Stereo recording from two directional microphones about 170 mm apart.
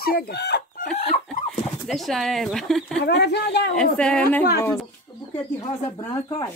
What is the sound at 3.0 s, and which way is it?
Speech, 80° left.